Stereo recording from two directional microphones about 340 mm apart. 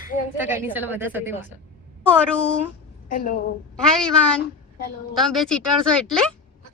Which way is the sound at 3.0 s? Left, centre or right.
Left.